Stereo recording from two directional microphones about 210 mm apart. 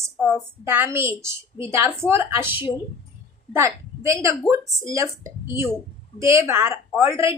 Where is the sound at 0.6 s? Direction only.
10° right (ahead or behind).